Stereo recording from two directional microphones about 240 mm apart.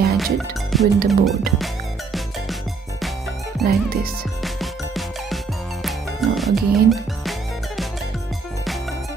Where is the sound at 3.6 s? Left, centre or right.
Right.